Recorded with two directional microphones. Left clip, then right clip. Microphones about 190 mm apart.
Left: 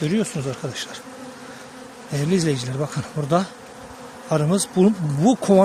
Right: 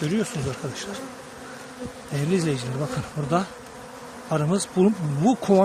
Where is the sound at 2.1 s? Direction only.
30° left (ahead or behind).